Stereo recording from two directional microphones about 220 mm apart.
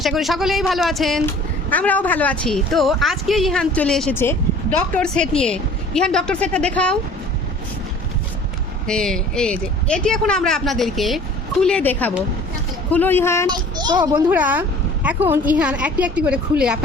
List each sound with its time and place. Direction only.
0.0 s a woman's voice: centre (ahead or behind)
8.9 s a woman's voice: 5° left (ahead or behind)
13.5 s a child's voice: 20° right (ahead or behind)
14.3 s a woman's voice: 5° right (ahead or behind)